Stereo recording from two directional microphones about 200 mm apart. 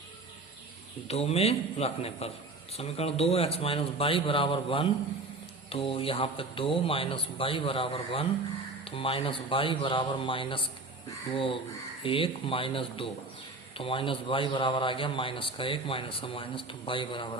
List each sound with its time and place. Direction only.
1.0 s a man's voice: 30° left (ahead or behind)
12.0 s a man's voice: 25° left (ahead or behind)